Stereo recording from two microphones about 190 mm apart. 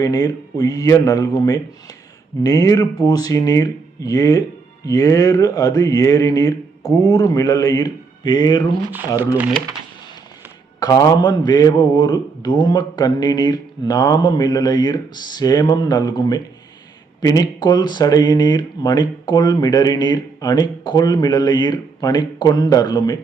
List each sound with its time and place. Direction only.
0.0 s speech: 20° left (ahead or behind)
8.9 s speech: 10° right (ahead or behind)
10.8 s speech: 20° left (ahead or behind)